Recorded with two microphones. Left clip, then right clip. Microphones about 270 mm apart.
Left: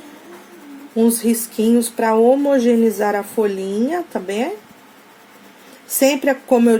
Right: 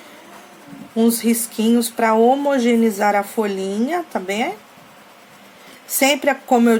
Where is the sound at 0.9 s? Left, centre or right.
Right.